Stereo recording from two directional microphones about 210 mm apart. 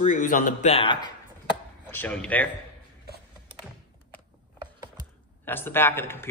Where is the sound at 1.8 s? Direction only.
10° left (ahead or behind).